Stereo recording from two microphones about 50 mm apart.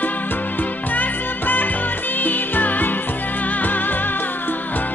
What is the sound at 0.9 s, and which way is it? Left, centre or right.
Music, left.